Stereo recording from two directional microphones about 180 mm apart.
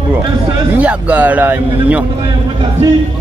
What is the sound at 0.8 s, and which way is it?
A man's voice, 10° right (ahead or behind).